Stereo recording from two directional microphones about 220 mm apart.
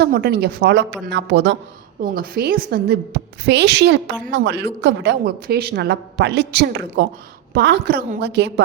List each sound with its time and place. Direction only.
0.0 s a woman's voice: 45° right (ahead or behind)